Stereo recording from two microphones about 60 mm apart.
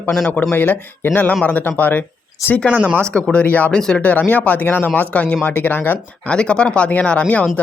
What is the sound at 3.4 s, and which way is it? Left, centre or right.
Speech, left.